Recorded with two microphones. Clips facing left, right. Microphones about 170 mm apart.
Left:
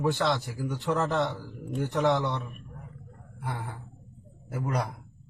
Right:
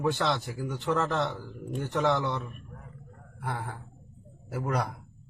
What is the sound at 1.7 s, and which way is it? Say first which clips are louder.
Speech: left 2 dB; centre (ahead or behind).